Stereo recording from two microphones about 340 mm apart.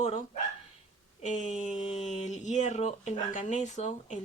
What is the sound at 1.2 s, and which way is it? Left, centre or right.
Speech, left.